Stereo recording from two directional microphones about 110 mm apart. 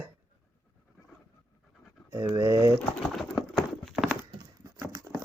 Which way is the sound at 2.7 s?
5° left (ahead or behind).